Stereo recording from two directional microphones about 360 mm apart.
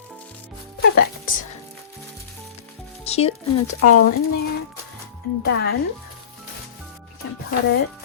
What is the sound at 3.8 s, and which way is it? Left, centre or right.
Speech, left.